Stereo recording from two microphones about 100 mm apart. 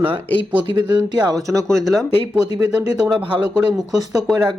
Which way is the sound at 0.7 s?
45° right (ahead or behind).